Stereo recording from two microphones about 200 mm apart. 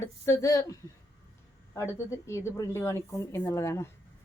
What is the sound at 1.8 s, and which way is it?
Speech, 15° left (ahead or behind).